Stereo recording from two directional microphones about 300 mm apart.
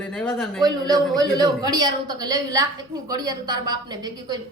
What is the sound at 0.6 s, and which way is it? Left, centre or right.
A woman's voice, centre.